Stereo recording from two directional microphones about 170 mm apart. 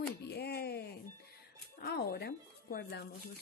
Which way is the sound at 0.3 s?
70° left (ahead or behind).